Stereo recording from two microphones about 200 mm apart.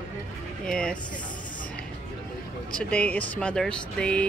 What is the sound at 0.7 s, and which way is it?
Speech, 5° left (ahead or behind).